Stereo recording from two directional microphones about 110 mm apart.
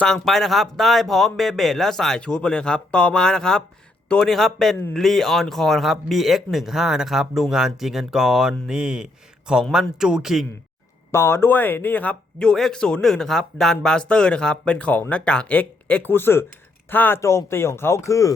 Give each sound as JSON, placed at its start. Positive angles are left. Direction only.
{"t": 0.0, "sound": "speech", "side_deg": 5}
{"t": 11.1, "sound": "speech", "side_deg": 25}